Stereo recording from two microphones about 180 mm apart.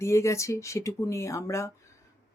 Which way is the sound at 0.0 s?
15° left (ahead or behind).